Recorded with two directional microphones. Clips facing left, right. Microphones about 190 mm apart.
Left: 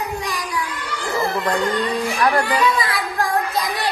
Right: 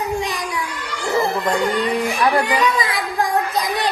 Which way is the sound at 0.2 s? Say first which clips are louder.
Right 2 dB; 20° right (ahead or behind).